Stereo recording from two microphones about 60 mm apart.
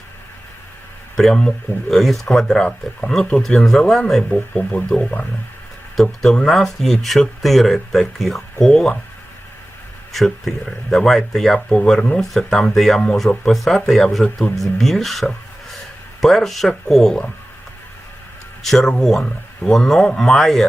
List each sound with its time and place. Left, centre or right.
1.1 s speech: centre
6.0 s speech: centre
8.6 s speech: centre
10.1 s speech: centre
18.6 s speech: centre